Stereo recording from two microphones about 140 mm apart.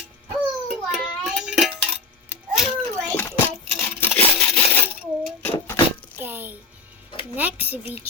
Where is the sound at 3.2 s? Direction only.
15° left (ahead or behind).